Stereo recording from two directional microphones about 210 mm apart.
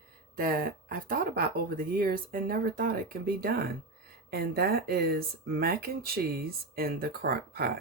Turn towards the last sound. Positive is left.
turn(degrees=-50)  # may be behind; listen again after turning